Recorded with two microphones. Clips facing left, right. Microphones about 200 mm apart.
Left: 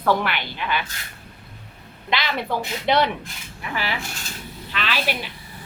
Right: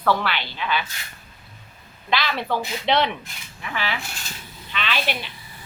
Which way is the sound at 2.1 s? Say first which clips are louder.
Right 1 dB; 15° left (ahead or behind).